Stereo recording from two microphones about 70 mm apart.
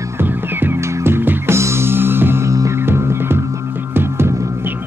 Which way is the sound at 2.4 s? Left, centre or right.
Right.